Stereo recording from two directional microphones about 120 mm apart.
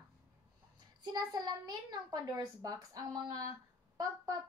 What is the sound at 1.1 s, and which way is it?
A child's voice, 35° right (ahead or behind).